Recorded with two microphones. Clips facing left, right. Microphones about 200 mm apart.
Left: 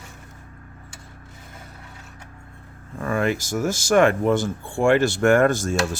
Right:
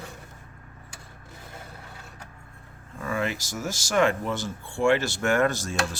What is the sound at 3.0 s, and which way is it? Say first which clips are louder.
Speech: left 6 dB; 55° left (ahead or behind).